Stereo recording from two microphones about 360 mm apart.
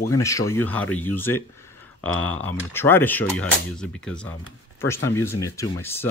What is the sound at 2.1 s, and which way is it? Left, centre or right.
Speech, left.